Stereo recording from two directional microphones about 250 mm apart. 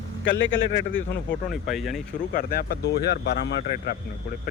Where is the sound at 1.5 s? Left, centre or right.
Centre.